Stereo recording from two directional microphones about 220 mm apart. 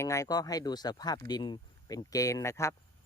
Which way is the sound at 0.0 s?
15° left (ahead or behind).